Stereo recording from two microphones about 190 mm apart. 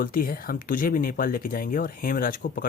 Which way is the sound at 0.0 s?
50° left (ahead or behind).